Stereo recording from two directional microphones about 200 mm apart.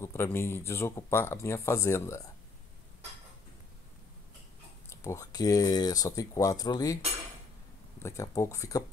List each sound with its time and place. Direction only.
0.0 s speech: 15° left (ahead or behind)
4.8 s speech: 15° left (ahead or behind)
8.0 s speech: 15° left (ahead or behind)